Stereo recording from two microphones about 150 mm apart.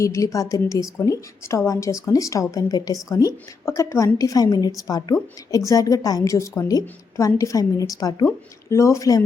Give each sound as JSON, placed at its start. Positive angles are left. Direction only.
{"t": 0.0, "sound": "a woman's voice", "side_deg": 20}